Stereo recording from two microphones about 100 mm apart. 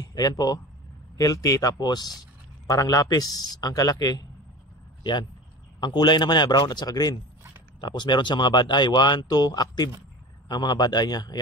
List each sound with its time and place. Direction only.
0.0 s a man's voice: 40° left (ahead or behind)
5.8 s speech: 45° left (ahead or behind)